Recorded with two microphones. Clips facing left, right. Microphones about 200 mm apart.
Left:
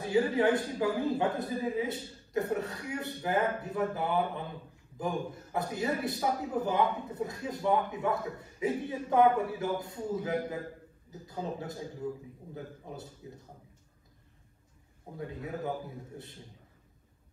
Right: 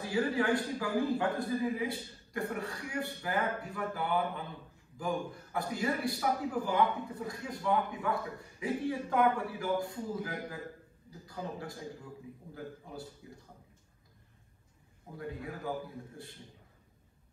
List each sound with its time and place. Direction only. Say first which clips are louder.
0.0 s a man's voice: left 4 dB; 20° left (ahead or behind)
15.1 s a man's voice: left 3 dB; 25° left (ahead or behind)